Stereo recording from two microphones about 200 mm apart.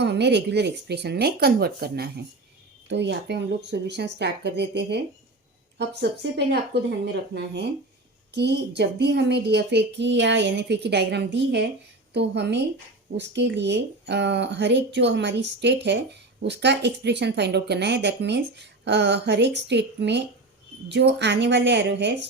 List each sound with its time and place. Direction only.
0.0 s speech: 55° right (ahead or behind)